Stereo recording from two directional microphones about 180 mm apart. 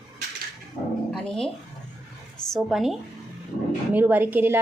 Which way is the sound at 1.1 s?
Centre (ahead or behind).